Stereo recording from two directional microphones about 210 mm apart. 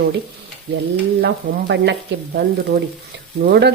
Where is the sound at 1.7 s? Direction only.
55° right (ahead or behind).